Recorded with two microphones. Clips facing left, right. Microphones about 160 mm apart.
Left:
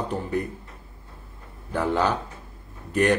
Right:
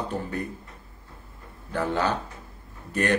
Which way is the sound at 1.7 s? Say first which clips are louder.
Left 2 dB; 15° left (ahead or behind).